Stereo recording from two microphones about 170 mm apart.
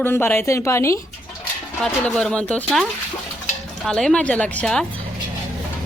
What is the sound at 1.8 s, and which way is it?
Speech, centre (ahead or behind).